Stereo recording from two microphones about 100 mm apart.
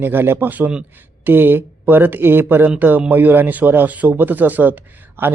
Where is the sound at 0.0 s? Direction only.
20° right (ahead or behind).